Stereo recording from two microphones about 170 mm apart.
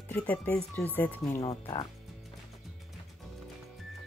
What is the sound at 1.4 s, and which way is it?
Speech, 30° left (ahead or behind).